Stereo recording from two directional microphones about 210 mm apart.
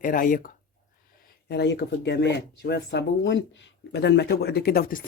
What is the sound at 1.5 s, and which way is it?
Speech, 55° left (ahead or behind).